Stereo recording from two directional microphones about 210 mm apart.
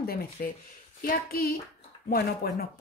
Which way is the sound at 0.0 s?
45° left (ahead or behind).